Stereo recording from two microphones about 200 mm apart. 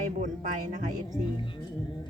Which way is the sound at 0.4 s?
35° right (ahead or behind).